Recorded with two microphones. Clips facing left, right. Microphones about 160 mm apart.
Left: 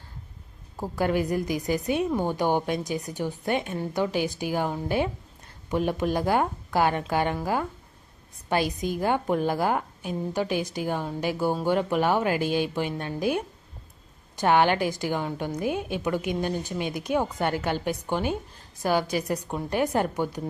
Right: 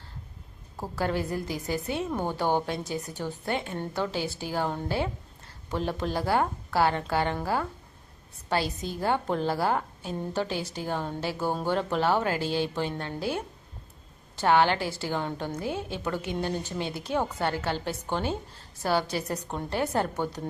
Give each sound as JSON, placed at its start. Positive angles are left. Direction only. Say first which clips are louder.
{"t": 0.8, "sound": "a woman's voice", "louder": "left 4 dB", "side_deg": 15}